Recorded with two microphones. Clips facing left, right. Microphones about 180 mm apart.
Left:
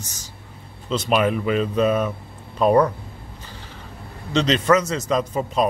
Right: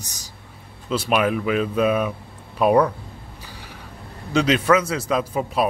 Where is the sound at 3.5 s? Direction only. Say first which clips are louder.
Even; 10° right (ahead or behind).